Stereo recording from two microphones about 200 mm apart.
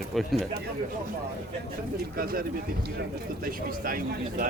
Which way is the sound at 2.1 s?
45° right (ahead or behind).